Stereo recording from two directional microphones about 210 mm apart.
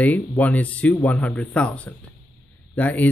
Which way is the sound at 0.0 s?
5° left (ahead or behind).